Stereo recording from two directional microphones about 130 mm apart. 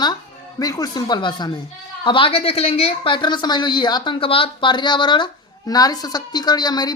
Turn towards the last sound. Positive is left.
turn(degrees=30)  # may be behind; listen again after turning